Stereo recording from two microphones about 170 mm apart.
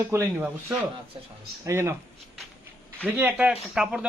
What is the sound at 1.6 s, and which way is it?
Speech, 15° right (ahead or behind).